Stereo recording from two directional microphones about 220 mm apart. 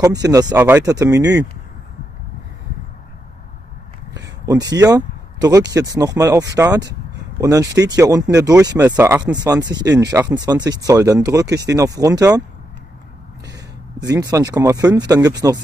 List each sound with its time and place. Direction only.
0.0 s speech: 15° right (ahead or behind)
4.1 s speech: 15° right (ahead or behind)
14.0 s speech: 15° right (ahead or behind)